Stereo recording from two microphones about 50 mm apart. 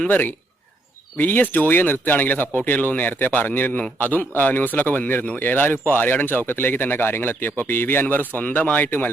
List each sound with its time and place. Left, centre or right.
0.1 s speech: left